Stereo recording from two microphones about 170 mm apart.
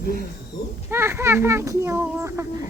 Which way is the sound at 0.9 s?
15° right (ahead or behind).